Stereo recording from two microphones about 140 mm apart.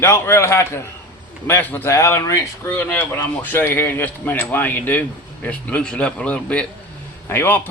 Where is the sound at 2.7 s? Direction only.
10° left (ahead or behind).